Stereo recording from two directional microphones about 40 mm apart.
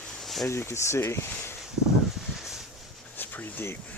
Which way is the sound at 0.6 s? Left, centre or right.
Left.